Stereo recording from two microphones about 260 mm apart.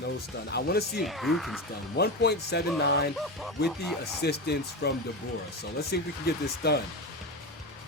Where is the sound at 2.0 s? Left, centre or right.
Left.